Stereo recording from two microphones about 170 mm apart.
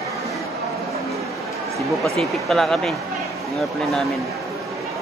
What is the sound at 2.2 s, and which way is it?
Speech, centre (ahead or behind).